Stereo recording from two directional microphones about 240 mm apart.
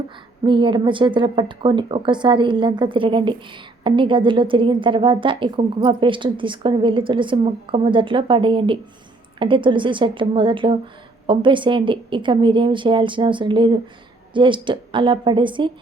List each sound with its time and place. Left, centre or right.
0.4 s speech: centre